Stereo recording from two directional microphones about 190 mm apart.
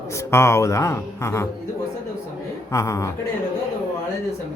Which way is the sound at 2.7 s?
15° left (ahead or behind).